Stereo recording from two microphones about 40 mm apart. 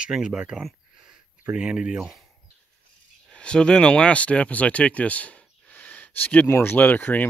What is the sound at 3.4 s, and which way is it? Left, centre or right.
Speech, left.